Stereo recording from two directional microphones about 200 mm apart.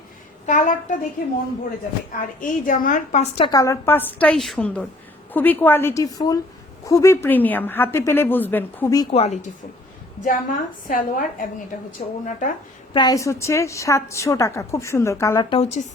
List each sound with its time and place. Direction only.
0.4 s a woman's voice: 40° left (ahead or behind)
2.1 s a woman's voice: 40° left (ahead or behind)
3.5 s a woman's voice: 15° left (ahead or behind)
9.1 s a woman's voice: 35° left (ahead or behind)
12.9 s a woman's voice: 20° left (ahead or behind)